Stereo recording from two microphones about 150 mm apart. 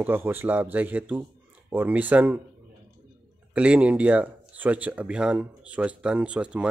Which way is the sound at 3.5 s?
10° right (ahead or behind).